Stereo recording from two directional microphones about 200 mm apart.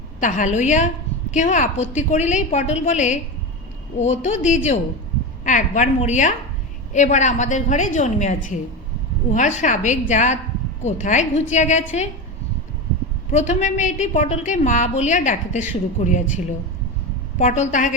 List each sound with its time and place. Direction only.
0.2 s a woman's voice: 40° left (ahead or behind)
13.3 s a woman's voice: 35° left (ahead or behind)